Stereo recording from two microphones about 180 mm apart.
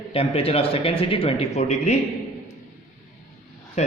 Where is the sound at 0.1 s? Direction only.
30° left (ahead or behind).